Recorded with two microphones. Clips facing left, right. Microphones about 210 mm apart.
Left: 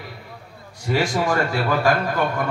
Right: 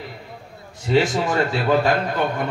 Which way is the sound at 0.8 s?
20° right (ahead or behind).